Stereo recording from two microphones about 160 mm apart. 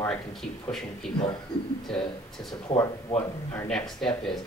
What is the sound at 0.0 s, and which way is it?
Speech, 5° left (ahead or behind).